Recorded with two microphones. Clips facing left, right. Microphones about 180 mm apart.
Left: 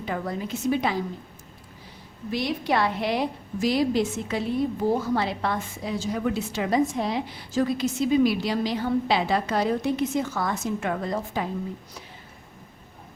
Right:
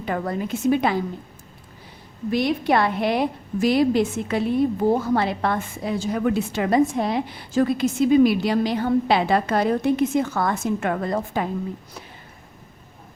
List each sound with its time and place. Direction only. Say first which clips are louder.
0.0 s a woman's voice: right 4 dB; 55° right (ahead or behind)
2.3 s a woman's voice: right 5 dB; 55° right (ahead or behind)